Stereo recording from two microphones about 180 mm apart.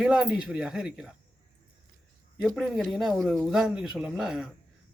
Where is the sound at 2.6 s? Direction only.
Centre (ahead or behind).